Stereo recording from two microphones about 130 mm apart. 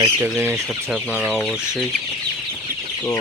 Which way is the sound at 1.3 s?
10° left (ahead or behind).